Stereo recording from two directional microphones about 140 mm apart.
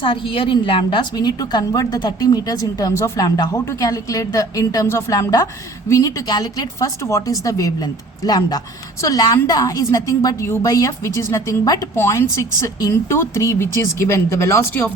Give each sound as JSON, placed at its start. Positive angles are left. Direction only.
{"t": 0.0, "sound": "a woman's voice", "side_deg": 40}